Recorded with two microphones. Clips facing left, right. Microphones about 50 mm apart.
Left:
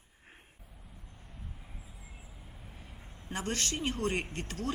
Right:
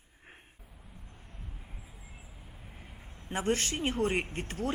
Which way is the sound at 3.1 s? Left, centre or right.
Centre.